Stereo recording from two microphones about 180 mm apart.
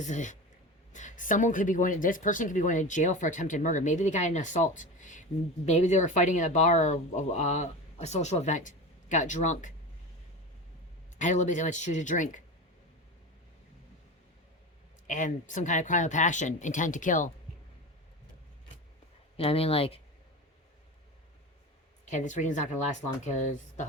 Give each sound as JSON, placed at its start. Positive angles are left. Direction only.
{"t": 0.0, "sound": "speech", "side_deg": 45}
{"t": 11.2, "sound": "speech", "side_deg": 40}
{"t": 15.0, "sound": "speech", "side_deg": 45}
{"t": 19.4, "sound": "speech", "side_deg": 30}
{"t": 22.1, "sound": "speech", "side_deg": 45}